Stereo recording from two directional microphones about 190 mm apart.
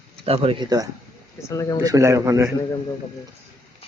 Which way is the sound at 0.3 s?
30° right (ahead or behind).